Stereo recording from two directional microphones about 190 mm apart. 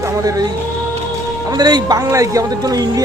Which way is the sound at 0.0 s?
15° right (ahead or behind).